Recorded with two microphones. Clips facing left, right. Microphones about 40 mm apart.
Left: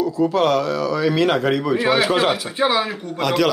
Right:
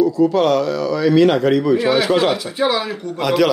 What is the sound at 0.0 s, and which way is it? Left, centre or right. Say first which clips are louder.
Speech: right 3 dB; centre.